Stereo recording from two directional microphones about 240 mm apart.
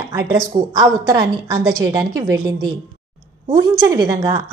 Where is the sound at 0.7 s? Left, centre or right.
Centre.